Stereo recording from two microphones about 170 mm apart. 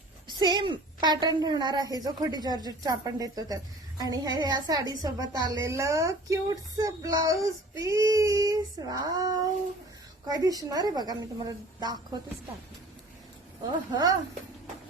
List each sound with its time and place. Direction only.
0.3 s a woman's voice: 25° right (ahead or behind)
10.2 s a woman's voice: 20° right (ahead or behind)
13.9 s a woman's voice: 20° right (ahead or behind)